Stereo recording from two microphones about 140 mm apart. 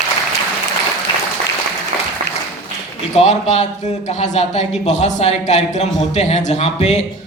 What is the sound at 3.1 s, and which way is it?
A man's voice, 50° left (ahead or behind).